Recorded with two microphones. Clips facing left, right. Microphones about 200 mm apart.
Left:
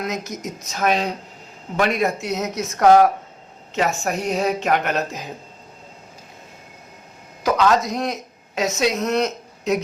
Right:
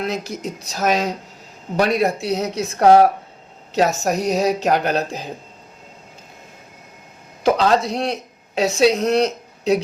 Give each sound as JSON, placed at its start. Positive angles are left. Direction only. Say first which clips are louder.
{"t": 0.0, "sound": "a woman's voice", "louder": "right 2 dB", "side_deg": -30}
{"t": 7.4, "sound": "a woman's voice", "louder": "right 2 dB", "side_deg": -30}